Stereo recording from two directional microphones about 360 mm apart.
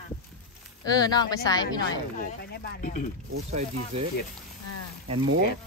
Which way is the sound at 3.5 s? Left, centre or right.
Centre.